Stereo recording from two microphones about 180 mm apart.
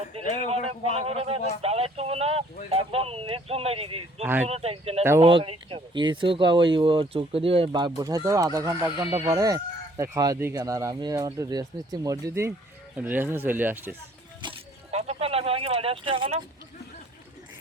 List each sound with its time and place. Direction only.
0.5 s speech: 35° right (ahead or behind)
4.2 s speech: 10° right (ahead or behind)
4.4 s speech: 35° right (ahead or behind); by 13.9 s 10° right (ahead or behind)
14.4 s a sound: 35° right (ahead or behind)